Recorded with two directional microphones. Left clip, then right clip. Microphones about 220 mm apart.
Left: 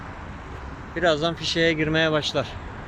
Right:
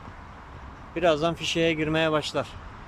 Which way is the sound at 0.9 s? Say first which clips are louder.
Left 1 dB; 5° right (ahead or behind).